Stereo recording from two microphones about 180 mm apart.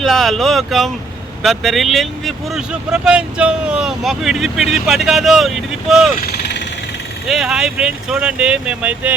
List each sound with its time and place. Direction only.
0.0 s speech: centre (ahead or behind)
6.1 s vehicle: 60° left (ahead or behind)
7.3 s speech: centre (ahead or behind)